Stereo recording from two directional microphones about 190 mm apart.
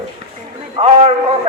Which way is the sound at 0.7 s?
30° right (ahead or behind).